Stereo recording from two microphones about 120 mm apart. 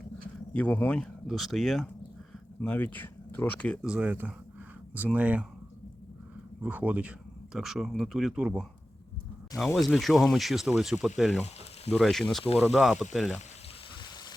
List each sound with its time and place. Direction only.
0.5 s speech: 15° left (ahead or behind)
2.6 s speech: 15° left (ahead or behind)
3.8 s speech: 10° right (ahead or behind)
6.6 s speech: 10° right (ahead or behind)
9.7 s speech: centre (ahead or behind)